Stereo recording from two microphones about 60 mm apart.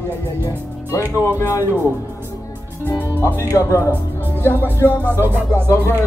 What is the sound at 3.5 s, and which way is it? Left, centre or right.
Speech, left.